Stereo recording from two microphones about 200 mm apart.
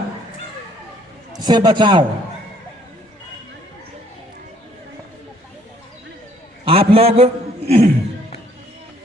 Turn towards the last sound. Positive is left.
turn(degrees=-30)  # may be behind; listen again after turning